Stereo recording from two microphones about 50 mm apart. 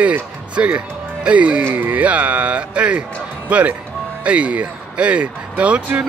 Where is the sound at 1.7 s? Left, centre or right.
Right.